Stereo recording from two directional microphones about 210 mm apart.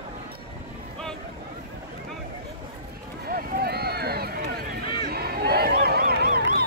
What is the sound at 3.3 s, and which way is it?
Run, 45° right (ahead or behind).